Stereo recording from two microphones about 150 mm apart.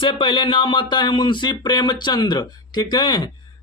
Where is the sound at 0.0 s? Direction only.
35° left (ahead or behind).